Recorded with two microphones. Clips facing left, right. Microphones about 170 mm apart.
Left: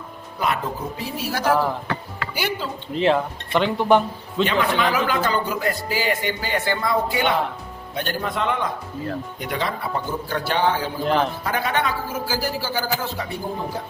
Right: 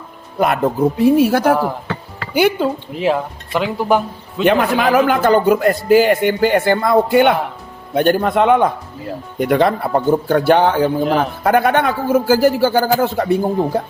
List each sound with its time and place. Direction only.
0.3 s speech: 55° right (ahead or behind)
2.9 s speech: 10° right (ahead or behind)
4.4 s speech: 55° right (ahead or behind)